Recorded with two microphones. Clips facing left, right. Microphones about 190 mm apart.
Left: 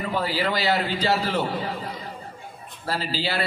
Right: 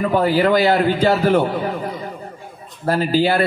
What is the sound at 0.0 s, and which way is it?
A man's voice, 50° right (ahead or behind).